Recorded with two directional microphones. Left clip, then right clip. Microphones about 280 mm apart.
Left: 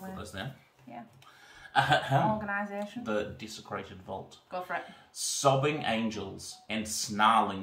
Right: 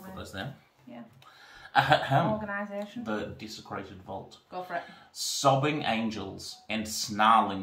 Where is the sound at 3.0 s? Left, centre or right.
Centre.